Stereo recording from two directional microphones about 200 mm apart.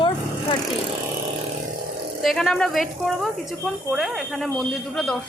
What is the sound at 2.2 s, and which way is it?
A woman's voice, centre (ahead or behind).